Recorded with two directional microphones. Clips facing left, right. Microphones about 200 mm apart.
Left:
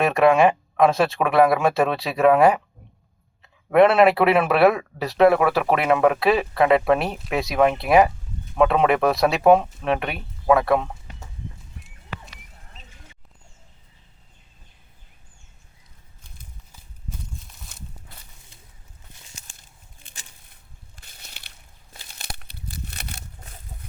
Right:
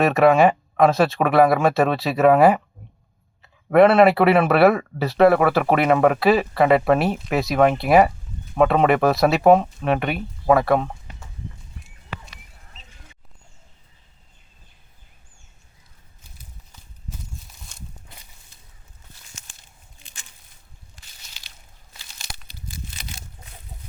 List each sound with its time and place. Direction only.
0.0 s speech: centre (ahead or behind)
3.7 s speech: centre (ahead or behind)
17.7 s walk: 5° left (ahead or behind)
20.9 s a sound: 55° left (ahead or behind)
21.9 s crushing: 60° left (ahead or behind)